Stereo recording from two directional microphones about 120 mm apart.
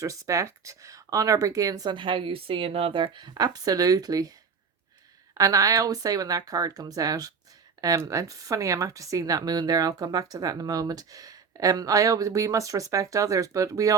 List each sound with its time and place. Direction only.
0.0 s speech: 25° right (ahead or behind)
5.4 s speech: 30° right (ahead or behind)